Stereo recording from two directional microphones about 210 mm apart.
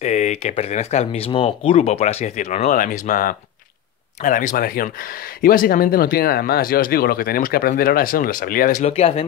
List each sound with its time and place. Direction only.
0.0 s speech: 35° left (ahead or behind)